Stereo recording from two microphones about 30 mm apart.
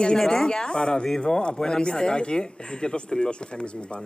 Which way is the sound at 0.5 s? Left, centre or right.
Left.